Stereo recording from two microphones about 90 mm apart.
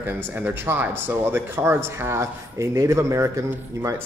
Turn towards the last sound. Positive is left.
turn(degrees=-35)  # may be behind; listen again after turning